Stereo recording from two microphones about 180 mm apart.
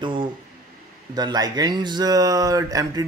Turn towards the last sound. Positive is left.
turn(degrees=-20)  # may be behind; listen again after turning